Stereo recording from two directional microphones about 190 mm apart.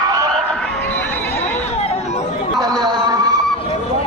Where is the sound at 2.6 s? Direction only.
20° right (ahead or behind).